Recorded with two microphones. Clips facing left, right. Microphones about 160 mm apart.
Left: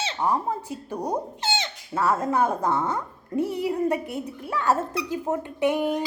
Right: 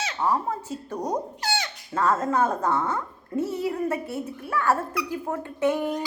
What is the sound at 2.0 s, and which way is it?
A woman's voice, 10° left (ahead or behind).